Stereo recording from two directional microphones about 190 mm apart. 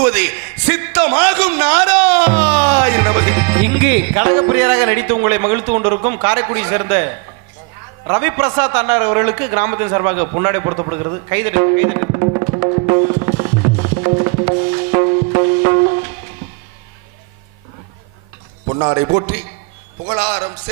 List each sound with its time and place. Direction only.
0.1 s speech: 15° right (ahead or behind)
2.2 s speech: 35° right (ahead or behind)
2.6 s a man's voice: 25° right (ahead or behind)
13.0 s music: 25° right (ahead or behind)
18.7 s a man's voice: 25° right (ahead or behind)